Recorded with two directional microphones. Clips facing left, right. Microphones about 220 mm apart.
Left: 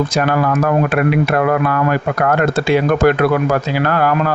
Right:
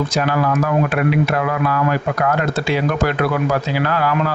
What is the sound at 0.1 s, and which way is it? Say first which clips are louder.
Speech: left 2 dB; 55° left (ahead or behind).